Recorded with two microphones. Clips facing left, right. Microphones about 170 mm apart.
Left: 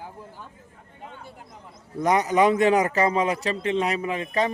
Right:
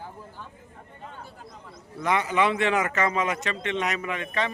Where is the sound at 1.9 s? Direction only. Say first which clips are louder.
Left 4 dB; 40° left (ahead or behind).